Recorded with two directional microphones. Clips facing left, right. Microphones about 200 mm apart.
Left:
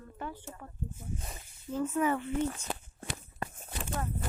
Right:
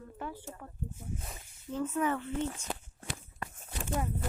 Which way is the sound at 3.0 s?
35° left (ahead or behind).